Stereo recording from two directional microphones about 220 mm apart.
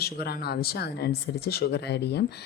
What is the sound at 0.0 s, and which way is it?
A woman's voice, 45° left (ahead or behind).